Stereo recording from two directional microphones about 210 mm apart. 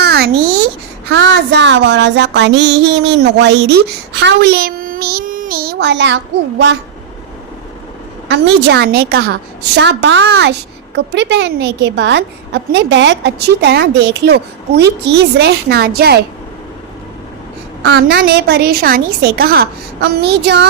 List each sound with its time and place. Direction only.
0.0 s a sound: 50° right (ahead or behind)
1.1 s music: 55° right (ahead or behind)
8.3 s a woman's voice: 50° right (ahead or behind)
9.7 s music: 55° right (ahead or behind)
15.4 s a woman's voice: 50° right (ahead or behind)
17.8 s a woman's voice: 50° right (ahead or behind)